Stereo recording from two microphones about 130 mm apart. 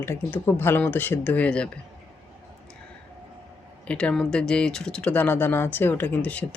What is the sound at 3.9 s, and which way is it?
Speech, 10° left (ahead or behind).